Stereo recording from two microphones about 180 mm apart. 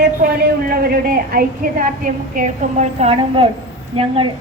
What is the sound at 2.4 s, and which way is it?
A woman's voice, 40° right (ahead or behind).